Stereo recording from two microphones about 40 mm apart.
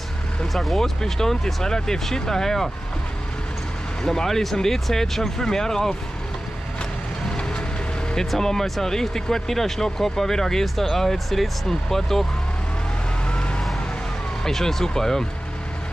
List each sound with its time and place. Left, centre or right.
0.5 s speech: centre
4.0 s speech: centre
8.3 s speech: centre
13.3 s vehicle: left
14.4 s speech: centre